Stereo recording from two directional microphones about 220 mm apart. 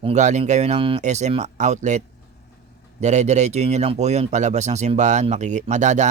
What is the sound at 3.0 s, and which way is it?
Speech, 30° right (ahead or behind).